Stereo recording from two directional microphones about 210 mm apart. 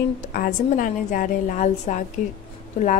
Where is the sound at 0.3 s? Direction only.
40° left (ahead or behind).